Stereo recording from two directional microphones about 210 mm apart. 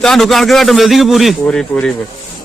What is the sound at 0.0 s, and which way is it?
A man's voice, centre (ahead or behind).